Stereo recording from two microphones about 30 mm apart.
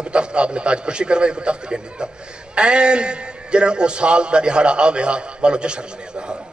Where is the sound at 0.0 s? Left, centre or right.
Right.